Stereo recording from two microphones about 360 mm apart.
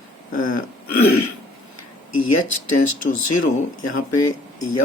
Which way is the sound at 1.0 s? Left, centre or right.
Left.